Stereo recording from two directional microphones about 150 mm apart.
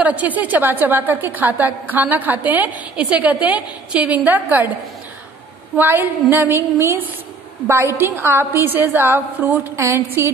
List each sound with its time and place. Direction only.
0.0 s a woman's voice: 10° right (ahead or behind)
5.8 s a woman's voice: 15° right (ahead or behind)